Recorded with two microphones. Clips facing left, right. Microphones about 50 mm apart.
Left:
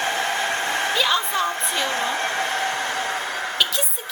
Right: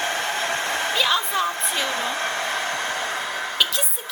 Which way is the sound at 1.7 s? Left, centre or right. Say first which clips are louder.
Left 1 dB; centre.